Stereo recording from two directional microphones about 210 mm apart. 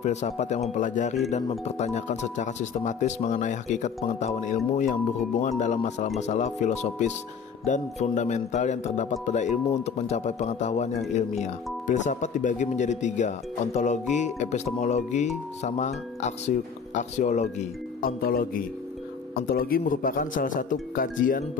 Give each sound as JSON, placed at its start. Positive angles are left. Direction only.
{"t": 0.0, "sound": "speech", "side_deg": 35}